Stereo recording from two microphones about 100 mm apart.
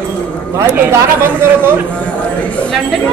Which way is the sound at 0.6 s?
25° right (ahead or behind).